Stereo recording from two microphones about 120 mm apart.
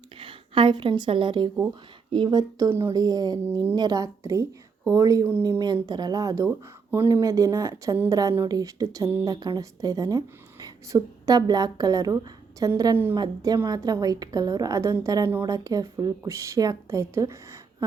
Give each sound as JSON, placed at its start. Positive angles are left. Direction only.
{"t": 0.2, "sound": "a woman's voice", "side_deg": -45}
{"t": 2.6, "sound": "speech", "side_deg": -20}
{"t": 2.9, "sound": "speech", "side_deg": -30}